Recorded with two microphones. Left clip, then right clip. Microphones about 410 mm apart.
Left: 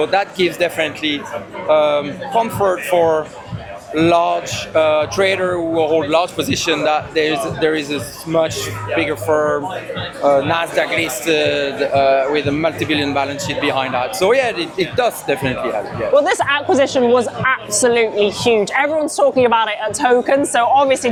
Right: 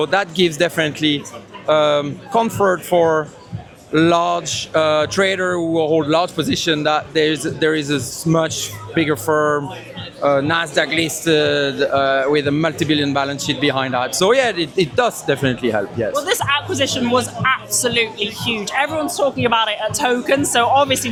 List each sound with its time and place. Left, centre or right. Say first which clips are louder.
0.0 s music: left 1 dB; right
1.6 s music: left 1 dB; right
16.1 s a woman's voice: left 6 dB; left